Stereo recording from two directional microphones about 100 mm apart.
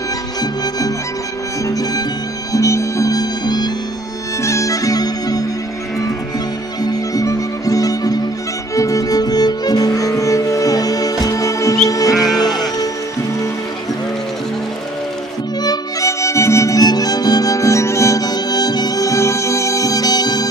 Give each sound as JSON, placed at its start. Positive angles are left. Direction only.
{"t": 0.4, "sound": "music", "side_deg": 35}
{"t": 4.4, "sound": "music", "side_deg": 30}
{"t": 6.8, "sound": "music", "side_deg": 40}
{"t": 12.1, "sound": "music", "side_deg": 0}
{"t": 15.6, "sound": "music", "side_deg": 35}